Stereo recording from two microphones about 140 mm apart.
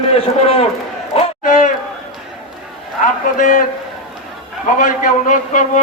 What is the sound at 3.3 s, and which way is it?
Speech, 70° left (ahead or behind).